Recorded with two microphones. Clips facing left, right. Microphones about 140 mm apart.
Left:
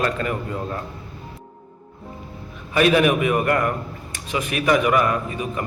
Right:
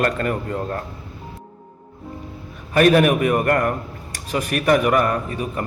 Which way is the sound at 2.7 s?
45° right (ahead or behind).